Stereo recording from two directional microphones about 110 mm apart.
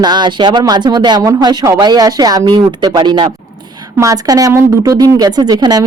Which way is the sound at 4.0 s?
30° right (ahead or behind).